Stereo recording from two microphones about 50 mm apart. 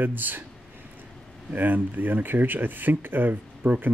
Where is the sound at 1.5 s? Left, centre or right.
Right.